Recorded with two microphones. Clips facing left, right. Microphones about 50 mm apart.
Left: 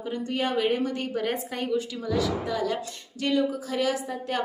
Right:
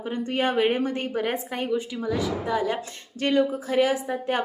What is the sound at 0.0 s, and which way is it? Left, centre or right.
A woman's voice, right.